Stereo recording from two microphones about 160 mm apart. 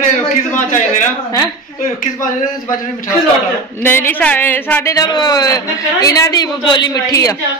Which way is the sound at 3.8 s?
15° left (ahead or behind).